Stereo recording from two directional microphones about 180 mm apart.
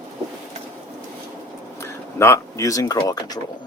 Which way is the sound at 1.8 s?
15° left (ahead or behind).